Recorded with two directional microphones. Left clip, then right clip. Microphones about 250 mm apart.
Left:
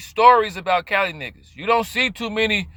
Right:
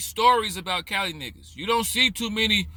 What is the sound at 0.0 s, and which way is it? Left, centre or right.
Speech, centre.